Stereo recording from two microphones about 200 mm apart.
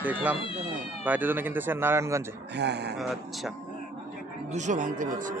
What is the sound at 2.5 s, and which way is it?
Speech, 55° right (ahead or behind).